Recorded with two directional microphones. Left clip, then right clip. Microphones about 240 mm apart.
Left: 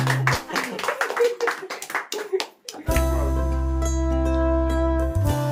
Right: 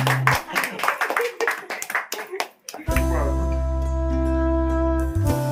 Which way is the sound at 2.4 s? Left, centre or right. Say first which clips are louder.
Right 2 dB; centre.